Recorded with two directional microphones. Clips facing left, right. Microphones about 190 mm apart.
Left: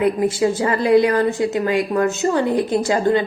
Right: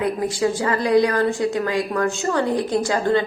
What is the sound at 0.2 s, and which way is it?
A woman's voice, 20° left (ahead or behind).